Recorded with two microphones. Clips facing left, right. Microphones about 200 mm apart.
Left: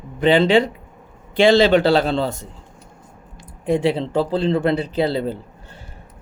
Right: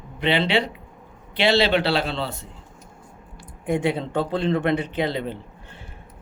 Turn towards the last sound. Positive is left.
turn(degrees=35)  # may be behind; listen again after turning